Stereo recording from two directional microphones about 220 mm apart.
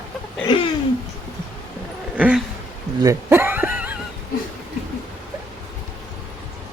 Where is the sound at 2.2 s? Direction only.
5° right (ahead or behind).